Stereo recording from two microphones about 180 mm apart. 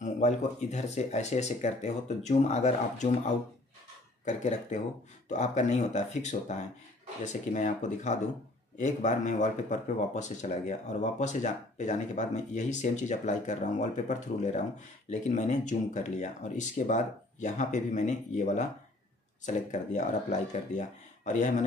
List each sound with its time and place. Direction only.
0.0 s speech: 40° left (ahead or behind)